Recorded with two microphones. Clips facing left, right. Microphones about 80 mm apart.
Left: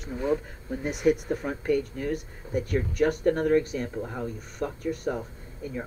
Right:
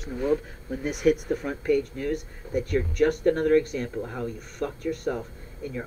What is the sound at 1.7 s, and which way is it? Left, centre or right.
Speech, centre.